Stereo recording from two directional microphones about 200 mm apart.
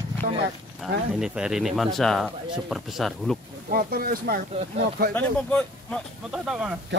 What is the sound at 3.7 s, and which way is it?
Speech, 50° right (ahead or behind).